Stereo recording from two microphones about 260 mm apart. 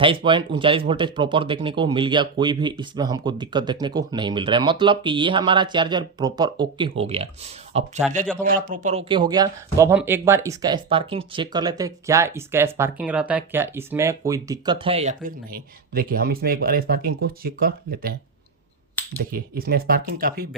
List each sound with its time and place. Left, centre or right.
0.0 s speech: centre; by 18.2 s right
19.0 s finger snapping: centre
19.3 s speech: right